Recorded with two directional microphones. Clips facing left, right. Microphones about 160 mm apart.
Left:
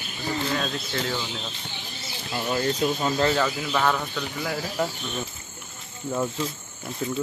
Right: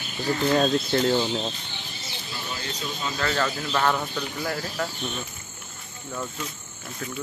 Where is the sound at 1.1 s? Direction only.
35° right (ahead or behind).